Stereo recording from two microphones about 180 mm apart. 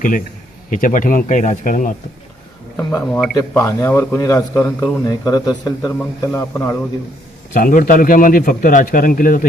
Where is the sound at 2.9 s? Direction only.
10° left (ahead or behind).